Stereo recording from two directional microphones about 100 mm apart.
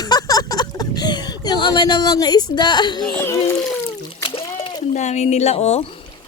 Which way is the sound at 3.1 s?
20° left (ahead or behind).